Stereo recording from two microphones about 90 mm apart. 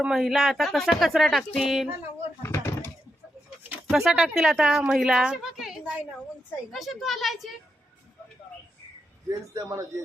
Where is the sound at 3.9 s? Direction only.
5° right (ahead or behind).